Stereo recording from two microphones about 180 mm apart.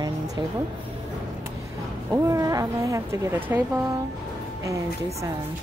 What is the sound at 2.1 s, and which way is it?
Speech, 15° right (ahead or behind).